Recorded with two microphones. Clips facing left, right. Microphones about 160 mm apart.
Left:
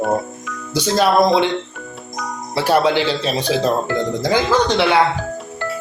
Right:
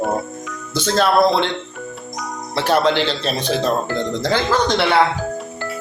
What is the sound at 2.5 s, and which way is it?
Speech, 10° left (ahead or behind).